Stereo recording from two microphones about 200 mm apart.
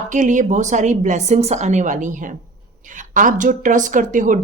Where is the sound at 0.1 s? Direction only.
40° right (ahead or behind).